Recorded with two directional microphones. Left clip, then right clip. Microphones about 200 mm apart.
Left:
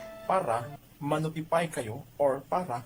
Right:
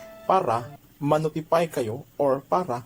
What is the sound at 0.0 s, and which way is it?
Music, centre (ahead or behind).